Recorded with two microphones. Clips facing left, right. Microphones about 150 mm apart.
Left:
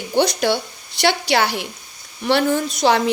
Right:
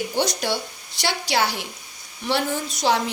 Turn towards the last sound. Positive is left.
turn(degrees=65)  # may be behind; listen again after turning